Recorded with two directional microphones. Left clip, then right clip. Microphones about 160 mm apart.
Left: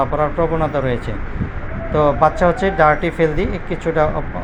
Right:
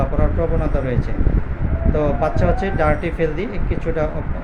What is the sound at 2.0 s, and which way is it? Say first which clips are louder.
Speech: left 7 dB; 15° left (ahead or behind).